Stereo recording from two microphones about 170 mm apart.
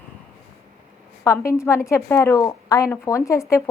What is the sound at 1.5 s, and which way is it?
A woman's voice, 15° left (ahead or behind).